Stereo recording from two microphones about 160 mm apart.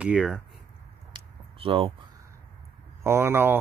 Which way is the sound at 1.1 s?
35° right (ahead or behind).